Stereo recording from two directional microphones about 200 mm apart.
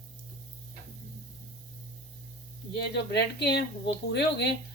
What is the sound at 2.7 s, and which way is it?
Speech, 60° left (ahead or behind).